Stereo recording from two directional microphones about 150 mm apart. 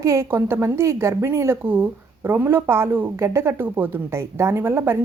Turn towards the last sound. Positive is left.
turn(degrees=-15)  # may be behind; listen again after turning